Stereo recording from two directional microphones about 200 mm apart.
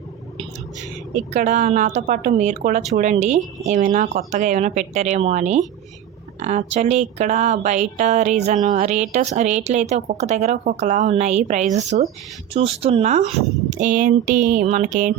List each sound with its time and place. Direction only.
1.1 s speech: 35° right (ahead or behind)